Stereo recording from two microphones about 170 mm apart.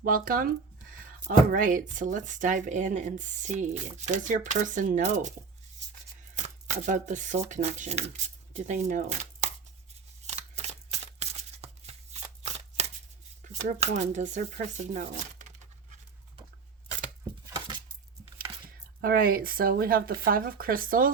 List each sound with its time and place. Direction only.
0.0 s speech: 55° right (ahead or behind)
6.3 s speech: 45° right (ahead or behind)
10.2 s shuffling cards: 40° right (ahead or behind)
13.4 s speech: 45° right (ahead or behind)
19.0 s speech: 60° right (ahead or behind)